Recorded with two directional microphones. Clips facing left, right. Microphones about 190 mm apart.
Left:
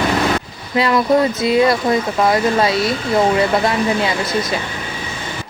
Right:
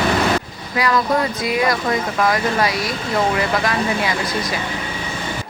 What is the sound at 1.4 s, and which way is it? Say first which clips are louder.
Speech: left 5 dB; 25° left (ahead or behind).